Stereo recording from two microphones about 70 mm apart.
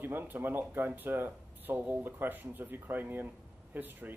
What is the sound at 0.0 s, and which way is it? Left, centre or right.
Speech, right.